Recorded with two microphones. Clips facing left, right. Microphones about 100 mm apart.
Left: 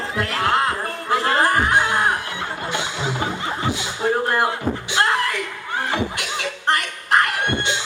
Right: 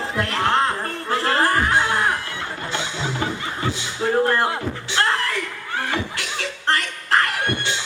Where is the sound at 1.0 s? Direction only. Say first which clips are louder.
Left 1 dB; 15° left (ahead or behind).